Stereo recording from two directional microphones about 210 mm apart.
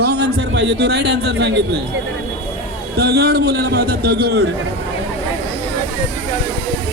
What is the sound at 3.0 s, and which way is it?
A man's voice, 50° right (ahead or behind).